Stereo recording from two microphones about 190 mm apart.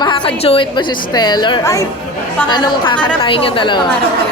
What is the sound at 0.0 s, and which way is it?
A woman's voice, 25° left (ahead or behind).